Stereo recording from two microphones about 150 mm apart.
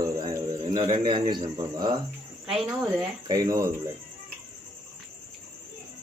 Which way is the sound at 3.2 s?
25° right (ahead or behind).